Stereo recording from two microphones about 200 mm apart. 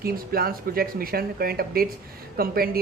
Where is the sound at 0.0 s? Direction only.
50° right (ahead or behind).